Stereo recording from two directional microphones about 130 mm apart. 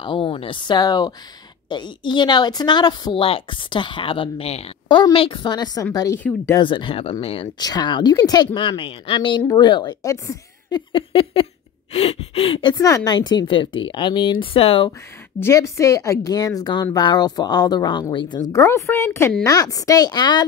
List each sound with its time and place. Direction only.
0.0 s a woman's voice: 40° left (ahead or behind)
3.2 s a woman's voice: 45° left (ahead or behind)
4.8 s a woman's voice: 35° left (ahead or behind)
6.1 s speech: 15° left (ahead or behind)
6.6 s speech: 40° left (ahead or behind)
7.5 s a woman's voice: 30° left (ahead or behind)
10.9 s a sound: 45° left (ahead or behind)
11.9 s speech: 50° left (ahead or behind)
12.7 s a woman's voice: 25° left (ahead or behind); by 14.9 s 45° left (ahead or behind)
15.4 s a woman's voice: 20° left (ahead or behind); by 18.4 s 40° left (ahead or behind)
18.5 s a woman's voice: 25° left (ahead or behind)